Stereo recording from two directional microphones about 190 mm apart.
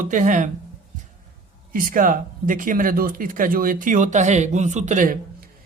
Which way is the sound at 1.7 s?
50° right (ahead or behind).